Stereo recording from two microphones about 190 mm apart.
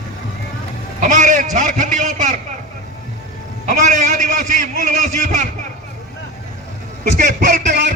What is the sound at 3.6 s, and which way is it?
A man's voice, 40° right (ahead or behind).